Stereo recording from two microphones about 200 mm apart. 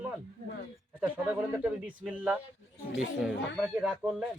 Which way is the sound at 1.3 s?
5° right (ahead or behind).